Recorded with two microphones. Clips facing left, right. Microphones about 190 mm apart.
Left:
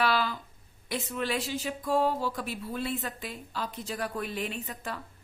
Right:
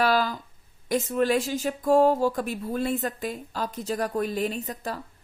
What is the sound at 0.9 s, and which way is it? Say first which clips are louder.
A woman's voice: right 8 dB; 45° right (ahead or behind).